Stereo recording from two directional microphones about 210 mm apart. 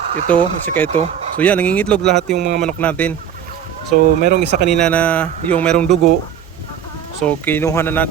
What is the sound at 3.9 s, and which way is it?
Speech, 35° right (ahead or behind).